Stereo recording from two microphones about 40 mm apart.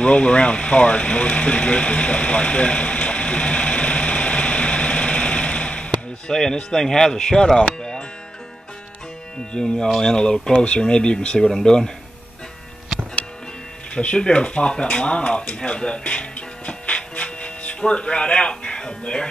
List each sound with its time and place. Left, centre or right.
0.0 s sewing machine: left
6.3 s speech: centre
9.5 s speech: centre
13.9 s speech: left